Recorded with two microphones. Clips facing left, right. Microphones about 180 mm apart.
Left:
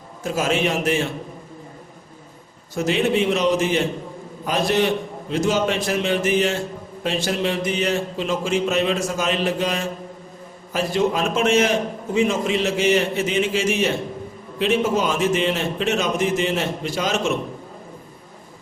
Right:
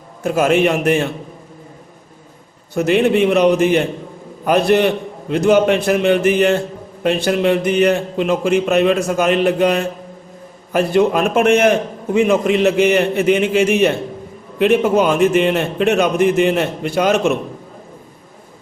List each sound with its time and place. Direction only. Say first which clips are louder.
0.2 s a man's voice: right 7 dB; 60° right (ahead or behind)
2.7 s a man's voice: right 6 dB; 60° right (ahead or behind)